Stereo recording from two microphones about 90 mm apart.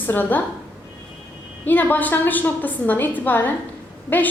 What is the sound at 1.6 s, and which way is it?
A woman's voice, 20° left (ahead or behind).